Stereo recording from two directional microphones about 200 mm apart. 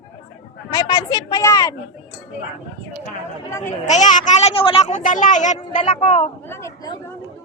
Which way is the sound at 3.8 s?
35° left (ahead or behind).